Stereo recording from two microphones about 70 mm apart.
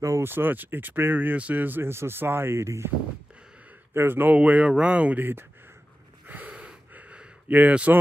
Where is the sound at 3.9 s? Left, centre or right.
Right.